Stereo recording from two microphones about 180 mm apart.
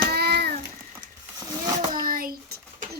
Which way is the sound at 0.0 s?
60° right (ahead or behind).